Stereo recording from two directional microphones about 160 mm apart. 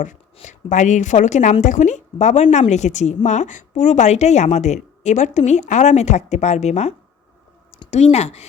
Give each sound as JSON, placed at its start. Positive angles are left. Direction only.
{"t": 0.3, "sound": "speech", "side_deg": 50}